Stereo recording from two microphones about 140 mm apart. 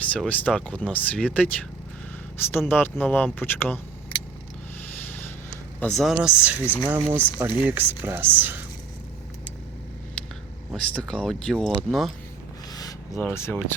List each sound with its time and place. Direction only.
0.0 s speech: 10° left (ahead or behind)
5.8 s speech: centre (ahead or behind)
10.7 s speech: 5° left (ahead or behind)
13.1 s speech: 15° left (ahead or behind)